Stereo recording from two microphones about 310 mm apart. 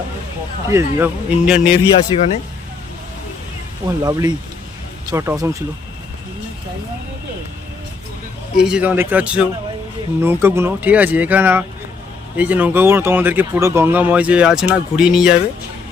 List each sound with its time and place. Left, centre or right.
0.7 s speech: centre
2.1 s speech: centre
4.0 s speech: centre
8.5 s speech: centre